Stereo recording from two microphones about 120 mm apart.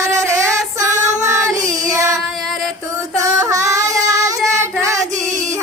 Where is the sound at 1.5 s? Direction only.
30° right (ahead or behind).